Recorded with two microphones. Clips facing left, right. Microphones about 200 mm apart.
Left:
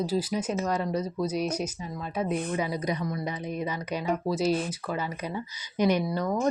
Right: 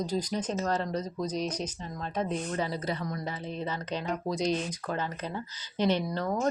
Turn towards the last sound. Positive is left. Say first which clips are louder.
# left 3 dB
turn(degrees=10)  # may be behind; listen again after turning